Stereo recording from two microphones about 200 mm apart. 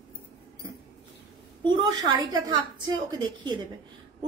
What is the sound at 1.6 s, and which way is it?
A woman's voice, 20° right (ahead or behind).